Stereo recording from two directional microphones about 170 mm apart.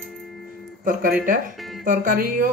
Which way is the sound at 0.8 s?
55° right (ahead or behind).